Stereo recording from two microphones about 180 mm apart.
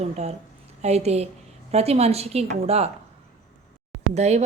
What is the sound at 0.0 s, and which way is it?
Speech, 35° right (ahead or behind).